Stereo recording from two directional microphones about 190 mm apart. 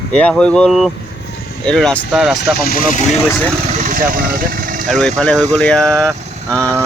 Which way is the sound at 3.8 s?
45° right (ahead or behind).